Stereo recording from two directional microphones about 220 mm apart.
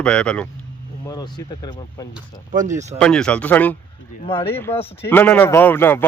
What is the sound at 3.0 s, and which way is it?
A man's voice, 5° left (ahead or behind).